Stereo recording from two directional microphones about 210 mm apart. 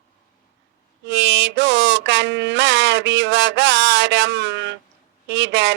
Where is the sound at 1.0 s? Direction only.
60° right (ahead or behind).